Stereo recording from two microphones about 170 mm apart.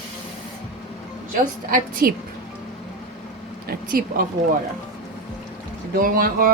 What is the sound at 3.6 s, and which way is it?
Speech, 55° right (ahead or behind).